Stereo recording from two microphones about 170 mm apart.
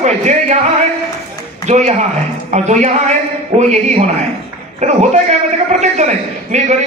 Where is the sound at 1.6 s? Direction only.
40° right (ahead or behind).